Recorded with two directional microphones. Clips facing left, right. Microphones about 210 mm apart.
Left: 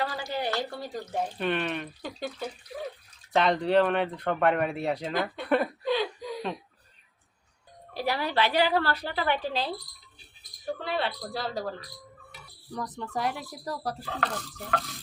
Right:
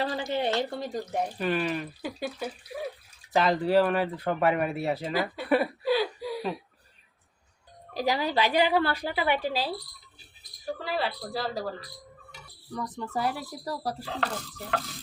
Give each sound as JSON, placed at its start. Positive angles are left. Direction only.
{"t": 0.0, "sound": "speech", "side_deg": -25}
{"t": 1.4, "sound": "speech", "side_deg": -5}
{"t": 7.9, "sound": "speech", "side_deg": -15}
{"t": 12.3, "sound": "music", "side_deg": 5}
{"t": 13.1, "sound": "speech", "side_deg": -5}